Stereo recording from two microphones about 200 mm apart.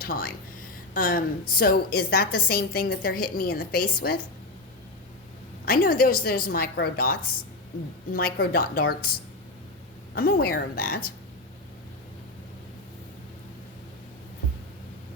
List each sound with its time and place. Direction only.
0.0 s a woman's voice: 50° left (ahead or behind)
5.6 s a woman's voice: 45° left (ahead or behind)
10.2 s a woman's voice: 50° left (ahead or behind)